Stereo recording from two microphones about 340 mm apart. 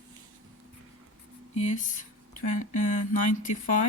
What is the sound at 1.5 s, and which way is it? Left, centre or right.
A woman's voice, centre.